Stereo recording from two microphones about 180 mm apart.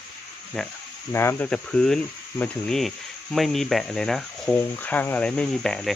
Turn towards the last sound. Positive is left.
turn(degrees=5)  # may be behind; listen again after turning